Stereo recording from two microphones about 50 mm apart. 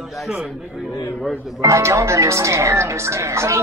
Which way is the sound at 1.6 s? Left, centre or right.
Right.